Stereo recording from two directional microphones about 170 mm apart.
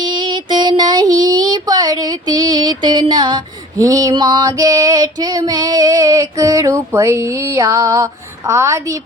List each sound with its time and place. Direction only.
0.0 s child singing: 25° right (ahead or behind)